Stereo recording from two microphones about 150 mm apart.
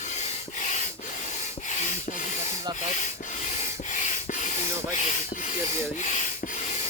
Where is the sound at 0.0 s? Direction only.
50° left (ahead or behind).